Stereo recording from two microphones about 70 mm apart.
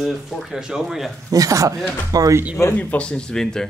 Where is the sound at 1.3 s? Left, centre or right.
Right.